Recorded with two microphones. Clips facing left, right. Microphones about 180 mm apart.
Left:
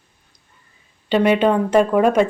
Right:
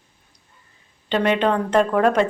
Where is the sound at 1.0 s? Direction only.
10° left (ahead or behind).